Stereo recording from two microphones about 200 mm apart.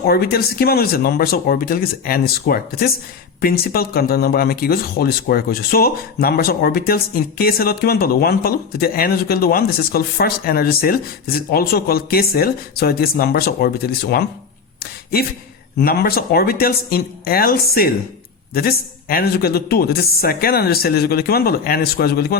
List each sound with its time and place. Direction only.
0.0 s speech: 50° left (ahead or behind)
15.8 s speech: 50° left (ahead or behind)